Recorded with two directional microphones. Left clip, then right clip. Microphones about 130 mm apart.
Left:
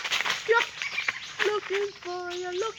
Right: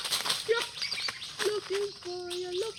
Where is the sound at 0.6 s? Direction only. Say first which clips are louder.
Left 5 dB; 5° left (ahead or behind).